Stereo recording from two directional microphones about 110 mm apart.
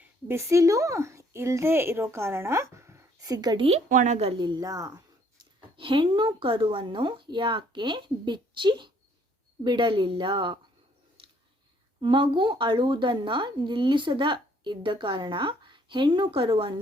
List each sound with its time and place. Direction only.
0.0 s speech: 25° right (ahead or behind)
3.3 s speech: 35° right (ahead or behind)
3.6 s a woman's voice: 65° right (ahead or behind)
4.4 s speech: 40° right (ahead or behind)
5.7 s a woman's voice: 50° right (ahead or behind)
11.9 s a woman's voice: 50° right (ahead or behind)